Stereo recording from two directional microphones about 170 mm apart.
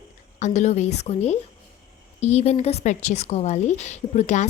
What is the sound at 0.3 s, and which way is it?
A woman's voice, 45° left (ahead or behind).